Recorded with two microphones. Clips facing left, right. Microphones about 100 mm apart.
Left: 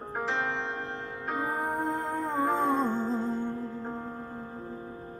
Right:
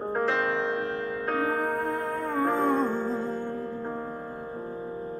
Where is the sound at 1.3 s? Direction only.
55° right (ahead or behind).